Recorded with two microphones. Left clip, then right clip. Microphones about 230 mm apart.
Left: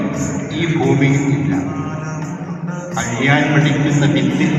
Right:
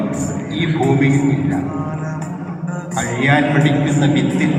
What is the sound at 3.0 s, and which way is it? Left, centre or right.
A man's voice, right.